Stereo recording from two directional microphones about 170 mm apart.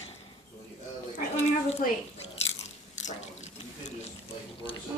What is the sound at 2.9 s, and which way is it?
Water, 45° left (ahead or behind).